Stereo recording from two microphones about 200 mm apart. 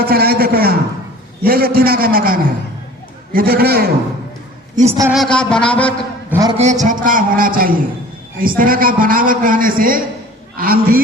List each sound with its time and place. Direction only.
0.0 s a sound: 50° right (ahead or behind)
1.5 s a man's voice: 50° right (ahead or behind)
4.7 s a woman's voice: 35° right (ahead or behind)
5.1 s a sound: 5° left (ahead or behind)
6.3 s a man's voice: 15° right (ahead or behind)
6.6 s a man's voice: 35° right (ahead or behind)